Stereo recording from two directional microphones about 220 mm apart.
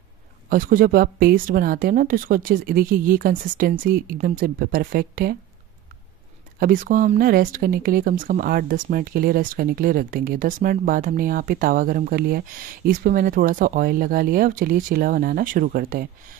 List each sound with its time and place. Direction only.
0.5 s speech: 40° right (ahead or behind)
6.6 s speech: 40° right (ahead or behind)